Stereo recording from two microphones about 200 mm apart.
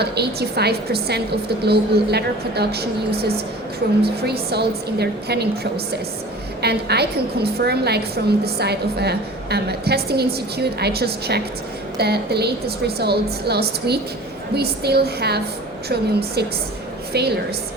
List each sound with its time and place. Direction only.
0.0 s a woman's voice: 55° right (ahead or behind)